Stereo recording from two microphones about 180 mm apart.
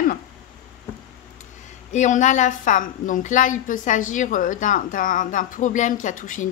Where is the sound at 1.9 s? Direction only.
40° left (ahead or behind).